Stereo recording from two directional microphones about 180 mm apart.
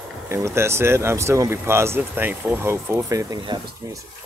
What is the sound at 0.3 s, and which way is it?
Speech, 15° right (ahead or behind).